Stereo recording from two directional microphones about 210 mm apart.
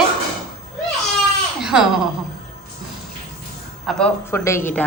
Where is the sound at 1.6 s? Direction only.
5° right (ahead or behind).